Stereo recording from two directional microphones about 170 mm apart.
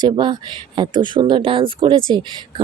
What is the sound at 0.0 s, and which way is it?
Speech, 25° right (ahead or behind).